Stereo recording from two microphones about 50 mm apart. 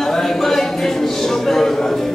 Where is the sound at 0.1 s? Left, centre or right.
Centre.